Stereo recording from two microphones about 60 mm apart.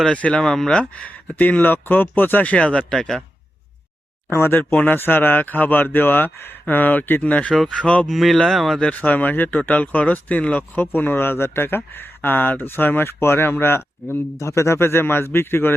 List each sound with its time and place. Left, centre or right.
0.1 s speech: left
0.4 s speech: centre
0.7 s speech: left
4.3 s speech: left
7.8 s speech: centre
8.1 s speech: centre
8.8 s speech: left
14.3 s speech: left